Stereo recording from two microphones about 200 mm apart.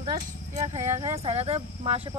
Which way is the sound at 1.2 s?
30° right (ahead or behind).